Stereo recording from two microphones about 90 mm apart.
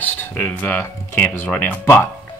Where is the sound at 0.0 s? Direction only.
20° left (ahead or behind).